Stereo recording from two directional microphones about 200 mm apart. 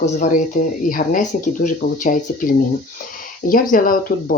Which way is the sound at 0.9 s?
45° left (ahead or behind).